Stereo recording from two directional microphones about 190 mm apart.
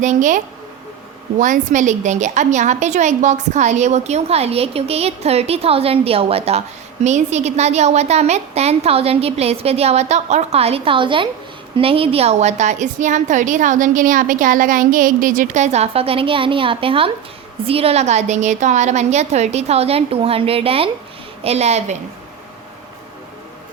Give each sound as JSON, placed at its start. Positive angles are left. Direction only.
{"t": 0.0, "sound": "a woman's voice", "side_deg": -40}